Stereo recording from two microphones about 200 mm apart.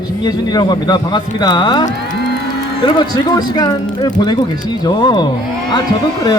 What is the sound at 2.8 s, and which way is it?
Speech, 20° left (ahead or behind).